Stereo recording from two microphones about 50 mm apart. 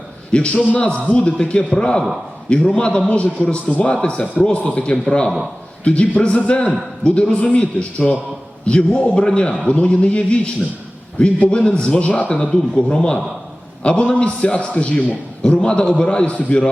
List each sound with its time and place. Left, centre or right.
0.3 s a man's voice: left